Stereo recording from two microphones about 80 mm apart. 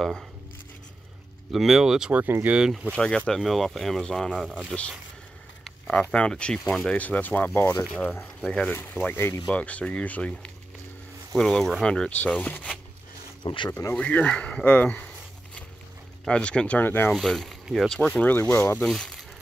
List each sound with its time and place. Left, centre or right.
1.5 s speech: centre
3.0 s speech: centre
9.1 s speech: left
9.5 s speech: centre
12.1 s speech: centre
13.4 s speech: left
13.7 s speech: left
13.9 s speech: centre
16.3 s speech: centre
17.1 s speech: centre
18.1 s speech: left
18.9 s speech: centre